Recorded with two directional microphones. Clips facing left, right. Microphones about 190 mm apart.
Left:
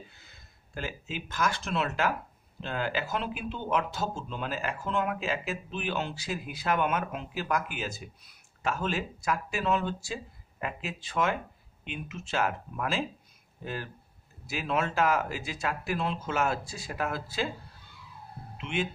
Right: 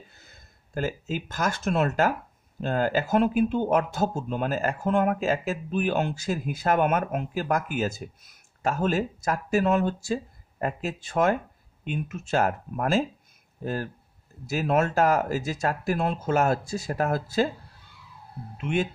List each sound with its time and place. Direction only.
0.1 s speech: 45° right (ahead or behind)
18.6 s speech: 45° right (ahead or behind)